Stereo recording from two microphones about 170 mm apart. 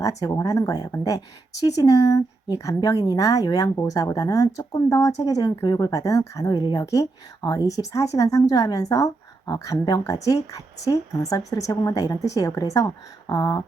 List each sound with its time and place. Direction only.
0.2 s speech: 20° left (ahead or behind)